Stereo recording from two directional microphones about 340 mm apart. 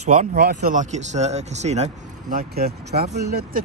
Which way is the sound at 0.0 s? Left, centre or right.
Centre.